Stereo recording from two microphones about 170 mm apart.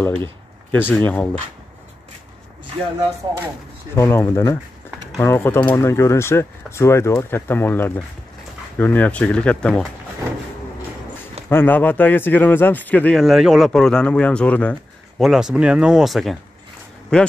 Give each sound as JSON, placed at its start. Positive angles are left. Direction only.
{"t": 0.7, "sound": "speech", "side_deg": 10}
{"t": 3.9, "sound": "speech", "side_deg": 15}
{"t": 11.4, "sound": "speech", "side_deg": 10}